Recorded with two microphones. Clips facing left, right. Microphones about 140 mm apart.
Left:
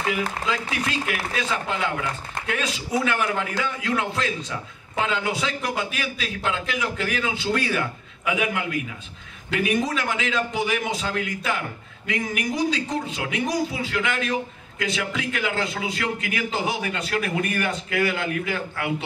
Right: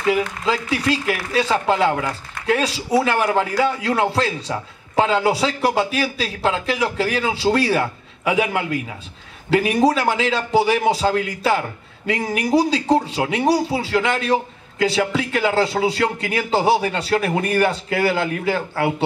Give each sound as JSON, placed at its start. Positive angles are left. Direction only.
{"t": 0.5, "sound": "speech", "side_deg": -35}